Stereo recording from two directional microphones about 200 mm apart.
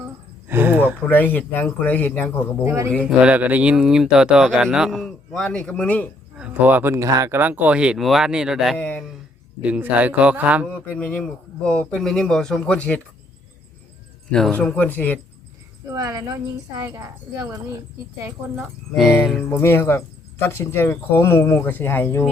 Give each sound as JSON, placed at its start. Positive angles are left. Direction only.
{"t": 0.4, "sound": "speech", "side_deg": -10}
{"t": 1.0, "sound": "speech", "side_deg": 10}
{"t": 2.6, "sound": "a woman's voice", "side_deg": -15}
{"t": 6.4, "sound": "a woman's voice", "side_deg": -10}
{"t": 10.7, "sound": "speech", "side_deg": 5}
{"t": 14.3, "sound": "speech", "side_deg": 5}
{"t": 16.0, "sound": "a woman's voice", "side_deg": -20}
{"t": 18.9, "sound": "speech", "side_deg": -5}
{"t": 19.2, "sound": "speech", "side_deg": 10}